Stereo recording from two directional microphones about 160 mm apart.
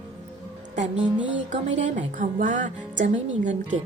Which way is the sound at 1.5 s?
50° right (ahead or behind).